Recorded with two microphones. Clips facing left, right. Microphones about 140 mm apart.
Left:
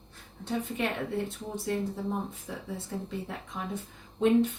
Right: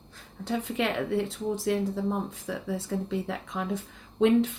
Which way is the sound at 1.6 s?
80° right.